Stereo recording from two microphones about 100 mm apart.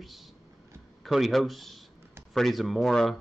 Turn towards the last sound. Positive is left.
turn(degrees=5)  # may be behind; listen again after turning